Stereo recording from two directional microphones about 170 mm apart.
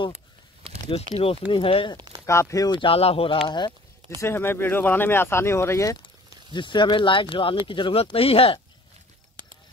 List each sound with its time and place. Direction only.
0.6 s a sound: 35° right (ahead or behind)
1.1 s speech: 35° left (ahead or behind)
2.2 s speech: 20° left (ahead or behind)
4.2 s speech: 15° left (ahead or behind); by 8.5 s 35° left (ahead or behind)